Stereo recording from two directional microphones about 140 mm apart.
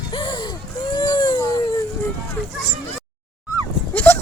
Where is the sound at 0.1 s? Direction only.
35° left (ahead or behind).